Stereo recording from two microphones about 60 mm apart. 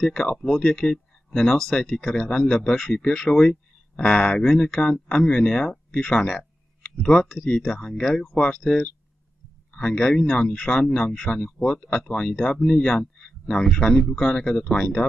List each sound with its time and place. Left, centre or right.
0.0 s speech: centre
6.8 s a sound: centre
7.2 s speech: centre